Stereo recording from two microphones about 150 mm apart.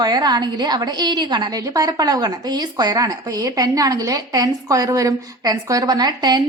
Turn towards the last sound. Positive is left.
turn(degrees=-30)  # may be behind; listen again after turning